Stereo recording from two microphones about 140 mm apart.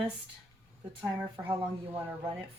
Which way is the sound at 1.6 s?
15° right (ahead or behind).